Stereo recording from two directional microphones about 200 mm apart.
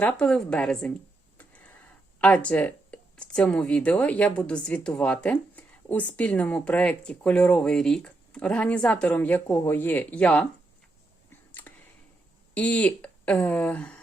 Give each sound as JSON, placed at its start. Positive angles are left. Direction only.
{"t": 0.0, "sound": "a woman's voice", "side_deg": 5}
{"t": 2.2, "sound": "speech", "side_deg": 5}
{"t": 11.7, "sound": "tick-tock", "side_deg": 5}
{"t": 12.5, "sound": "speech", "side_deg": 5}